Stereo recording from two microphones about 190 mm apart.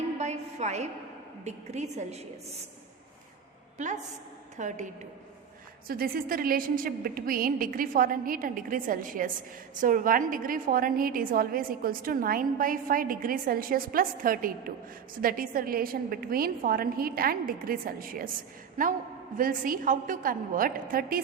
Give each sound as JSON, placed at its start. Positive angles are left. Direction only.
{"t": 0.2, "sound": "a sound", "side_deg": -35}
{"t": 1.5, "sound": "a woman's voice", "side_deg": -35}
{"t": 3.8, "sound": "a woman's voice", "side_deg": -40}
{"t": 5.9, "sound": "a woman's voice", "side_deg": -50}